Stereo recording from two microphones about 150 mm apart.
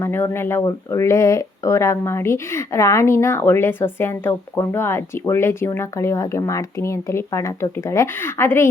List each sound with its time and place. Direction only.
0.0 s speech: 15° left (ahead or behind)